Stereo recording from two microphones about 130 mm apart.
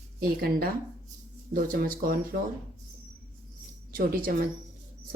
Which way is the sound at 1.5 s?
90° right.